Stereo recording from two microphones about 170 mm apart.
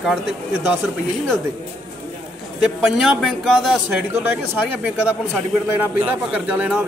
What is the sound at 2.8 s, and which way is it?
Speech, centre (ahead or behind).